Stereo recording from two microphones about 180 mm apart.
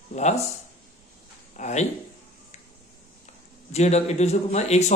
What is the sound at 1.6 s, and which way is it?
Speech, 40° left (ahead or behind).